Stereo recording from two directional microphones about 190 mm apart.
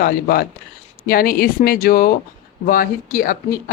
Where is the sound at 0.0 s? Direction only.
50° left (ahead or behind).